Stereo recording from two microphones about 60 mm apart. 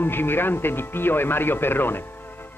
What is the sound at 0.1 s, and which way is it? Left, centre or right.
Speech, left.